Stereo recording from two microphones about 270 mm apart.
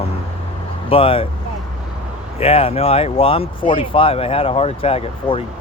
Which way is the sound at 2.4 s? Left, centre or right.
Left.